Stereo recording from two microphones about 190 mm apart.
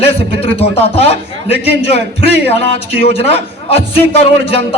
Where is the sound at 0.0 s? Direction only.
30° left (ahead or behind).